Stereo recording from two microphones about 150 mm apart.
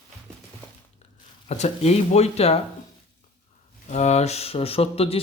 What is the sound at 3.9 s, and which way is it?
Speech, 50° left (ahead or behind).